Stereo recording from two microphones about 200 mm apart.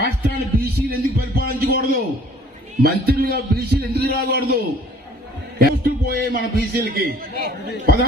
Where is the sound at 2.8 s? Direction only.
50° right (ahead or behind).